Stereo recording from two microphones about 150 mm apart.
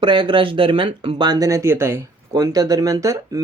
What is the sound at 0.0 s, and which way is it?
Speech, 30° right (ahead or behind).